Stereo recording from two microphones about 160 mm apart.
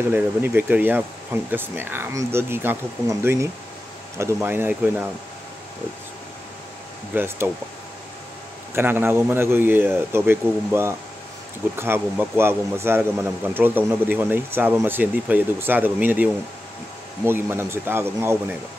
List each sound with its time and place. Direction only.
0.1 s a man's voice: 15° right (ahead or behind)
7.2 s a man's voice: 15° right (ahead or behind)
8.7 s a man's voice: 15° right (ahead or behind)